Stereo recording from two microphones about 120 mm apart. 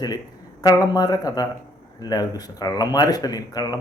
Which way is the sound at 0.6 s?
30° left (ahead or behind).